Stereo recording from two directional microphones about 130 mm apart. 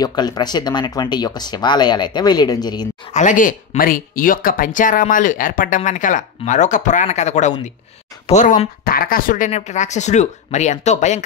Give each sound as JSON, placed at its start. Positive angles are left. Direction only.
{"t": 0.0, "sound": "speech", "side_deg": 30}
{"t": 3.1, "sound": "speech", "side_deg": 70}
{"t": 5.8, "sound": "speech", "side_deg": 75}
{"t": 8.3, "sound": "speech", "side_deg": 80}